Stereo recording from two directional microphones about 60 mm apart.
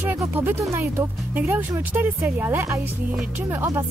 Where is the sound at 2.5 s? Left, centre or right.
Right.